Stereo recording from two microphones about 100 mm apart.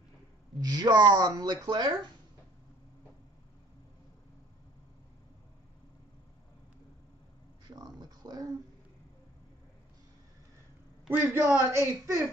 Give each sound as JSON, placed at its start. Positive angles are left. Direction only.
{"t": 0.6, "sound": "speech", "side_deg": -45}
{"t": 7.6, "sound": "a sound", "side_deg": -40}
{"t": 11.1, "sound": "a man's voice", "side_deg": -20}